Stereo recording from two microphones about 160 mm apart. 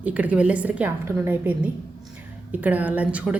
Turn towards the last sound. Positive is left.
turn(degrees=-10)  # may be behind; listen again after turning